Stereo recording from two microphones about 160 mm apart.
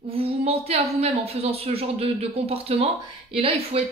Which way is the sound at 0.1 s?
40° right (ahead or behind).